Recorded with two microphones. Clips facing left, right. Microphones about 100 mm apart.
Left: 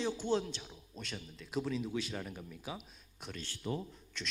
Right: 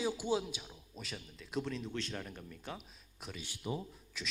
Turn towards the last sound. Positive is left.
turn(degrees=-5)  # may be behind; listen again after turning